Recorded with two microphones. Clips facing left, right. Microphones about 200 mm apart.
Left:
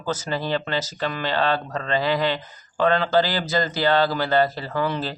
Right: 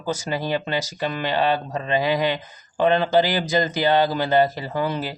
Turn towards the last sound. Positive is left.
turn(degrees=-15)  # may be behind; listen again after turning